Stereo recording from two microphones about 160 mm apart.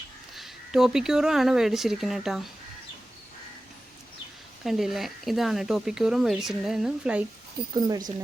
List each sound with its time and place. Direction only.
0.3 s speech: centre (ahead or behind)
4.6 s speech: centre (ahead or behind)
7.7 s speech: 25° right (ahead or behind)